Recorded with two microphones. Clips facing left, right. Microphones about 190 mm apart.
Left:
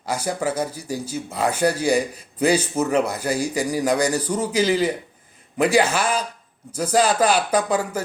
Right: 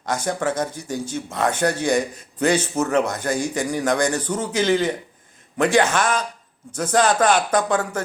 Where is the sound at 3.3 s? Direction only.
35° left (ahead or behind).